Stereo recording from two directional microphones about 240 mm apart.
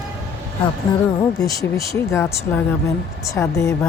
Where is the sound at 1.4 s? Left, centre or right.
Centre.